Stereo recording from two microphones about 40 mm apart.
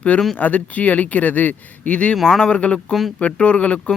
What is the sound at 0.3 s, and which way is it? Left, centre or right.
Speech, left.